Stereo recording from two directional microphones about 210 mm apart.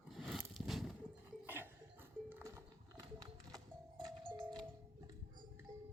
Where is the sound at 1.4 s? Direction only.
10° right (ahead or behind).